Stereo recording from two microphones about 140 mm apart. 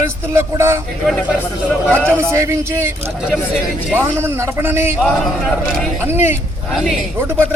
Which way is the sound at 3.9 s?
15° right (ahead or behind).